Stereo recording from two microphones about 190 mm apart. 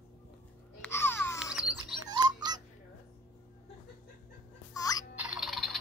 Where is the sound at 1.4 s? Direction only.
5° right (ahead or behind).